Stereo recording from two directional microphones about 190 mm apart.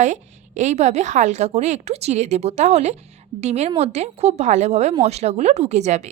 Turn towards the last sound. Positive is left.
turn(degrees=-35)  # may be behind; listen again after turning